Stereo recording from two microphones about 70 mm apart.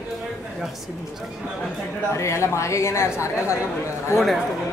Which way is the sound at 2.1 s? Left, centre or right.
Left.